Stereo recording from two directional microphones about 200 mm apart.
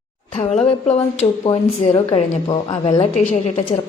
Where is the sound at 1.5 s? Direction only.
20° left (ahead or behind).